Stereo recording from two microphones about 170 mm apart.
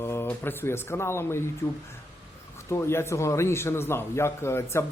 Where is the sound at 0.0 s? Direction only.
15° left (ahead or behind).